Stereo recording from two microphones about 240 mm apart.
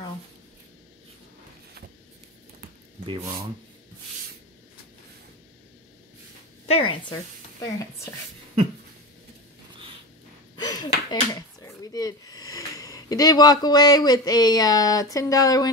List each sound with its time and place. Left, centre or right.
3.1 s speech: centre
6.7 s speech: left
7.6 s stir: centre
10.5 s speech: centre